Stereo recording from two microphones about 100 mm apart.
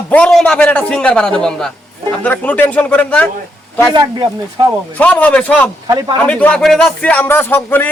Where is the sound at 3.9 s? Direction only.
45° right (ahead or behind).